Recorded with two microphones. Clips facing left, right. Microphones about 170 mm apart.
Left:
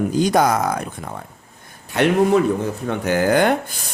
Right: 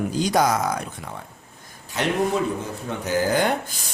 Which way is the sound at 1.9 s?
60° left (ahead or behind).